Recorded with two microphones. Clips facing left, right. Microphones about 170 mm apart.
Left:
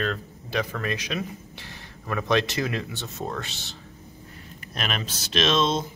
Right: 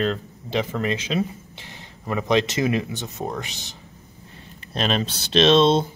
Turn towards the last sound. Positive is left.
turn(degrees=-30)  # may be behind; listen again after turning